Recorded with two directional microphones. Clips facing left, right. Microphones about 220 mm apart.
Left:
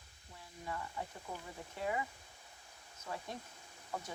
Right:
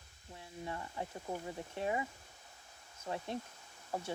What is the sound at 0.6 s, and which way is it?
Speech, 30° right (ahead or behind).